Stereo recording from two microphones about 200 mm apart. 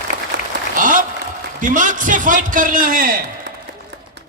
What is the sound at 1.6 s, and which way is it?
A man's voice, 40° right (ahead or behind).